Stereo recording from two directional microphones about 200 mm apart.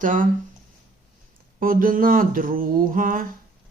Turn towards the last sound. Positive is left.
turn(degrees=-45)  # may be behind; listen again after turning